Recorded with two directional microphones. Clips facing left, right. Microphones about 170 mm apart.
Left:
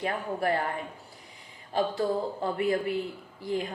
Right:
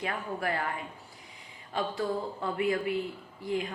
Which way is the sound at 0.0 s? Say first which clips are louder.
Left 4 dB; 35° left (ahead or behind).